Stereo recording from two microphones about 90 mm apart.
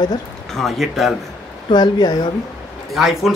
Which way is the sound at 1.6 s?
55° left (ahead or behind).